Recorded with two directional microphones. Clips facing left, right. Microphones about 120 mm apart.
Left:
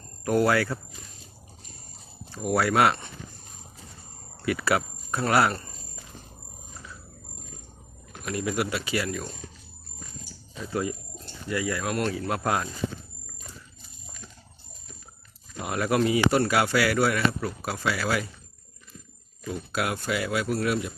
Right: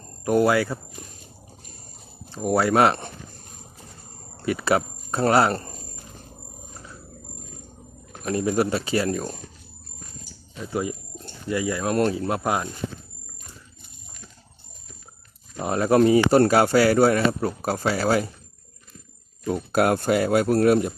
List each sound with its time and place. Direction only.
0.3 s speech: 20° right (ahead or behind)
2.3 s speech: 30° right (ahead or behind)
4.4 s speech: 25° right (ahead or behind)
8.2 s speech: 30° right (ahead or behind)
10.6 s speech: 20° right (ahead or behind)
11.9 s speech: 30° right (ahead or behind)
15.5 s speech: 30° right (ahead or behind)
19.5 s speech: 45° right (ahead or behind)